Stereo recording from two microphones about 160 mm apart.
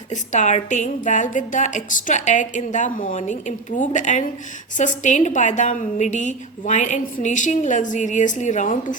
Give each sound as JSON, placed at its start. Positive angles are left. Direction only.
{"t": 0.1, "sound": "a woman's voice", "side_deg": 50}